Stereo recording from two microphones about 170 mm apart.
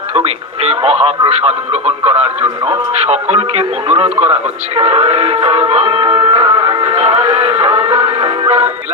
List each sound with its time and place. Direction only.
0.1 s speech: 35° right (ahead or behind)
4.8 s music: 40° right (ahead or behind)